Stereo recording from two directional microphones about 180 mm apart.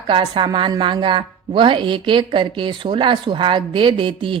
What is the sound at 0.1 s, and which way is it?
A woman's voice, 25° right (ahead or behind).